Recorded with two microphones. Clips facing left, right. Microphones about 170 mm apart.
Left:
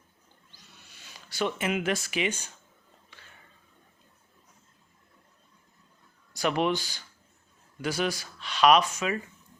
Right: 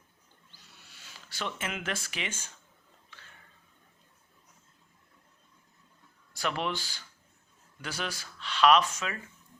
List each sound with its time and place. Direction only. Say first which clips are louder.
1.1 s speech: left 8 dB; 15° left (ahead or behind)
6.3 s speech: left 6 dB; 15° left (ahead or behind)